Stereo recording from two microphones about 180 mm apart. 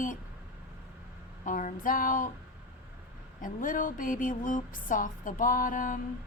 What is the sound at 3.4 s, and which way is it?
A woman's voice, 50° left (ahead or behind).